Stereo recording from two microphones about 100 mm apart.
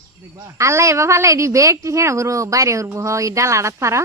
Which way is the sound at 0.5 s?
30° right (ahead or behind).